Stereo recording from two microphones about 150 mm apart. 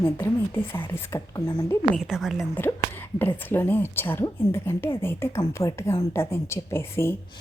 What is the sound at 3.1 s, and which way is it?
Speech, 15° left (ahead or behind).